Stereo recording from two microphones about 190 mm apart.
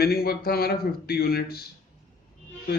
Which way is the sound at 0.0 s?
55° left (ahead or behind).